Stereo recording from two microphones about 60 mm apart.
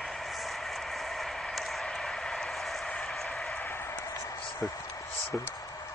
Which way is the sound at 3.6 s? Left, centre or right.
Left.